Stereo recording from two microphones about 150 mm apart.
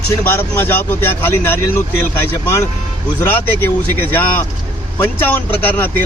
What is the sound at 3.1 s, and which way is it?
Speech, 15° left (ahead or behind).